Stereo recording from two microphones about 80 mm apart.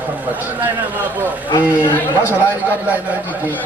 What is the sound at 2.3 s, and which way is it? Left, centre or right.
A man's voice, right.